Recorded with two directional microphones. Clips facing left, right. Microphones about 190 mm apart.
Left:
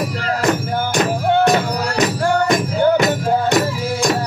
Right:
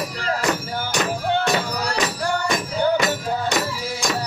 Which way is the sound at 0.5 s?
45° left (ahead or behind).